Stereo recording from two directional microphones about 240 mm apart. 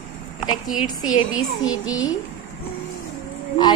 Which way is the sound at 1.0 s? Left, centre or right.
Left.